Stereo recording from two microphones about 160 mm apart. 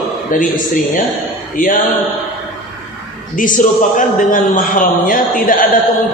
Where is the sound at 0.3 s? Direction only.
55° left (ahead or behind).